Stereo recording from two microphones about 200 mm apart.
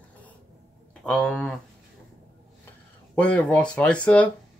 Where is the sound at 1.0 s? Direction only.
5° left (ahead or behind).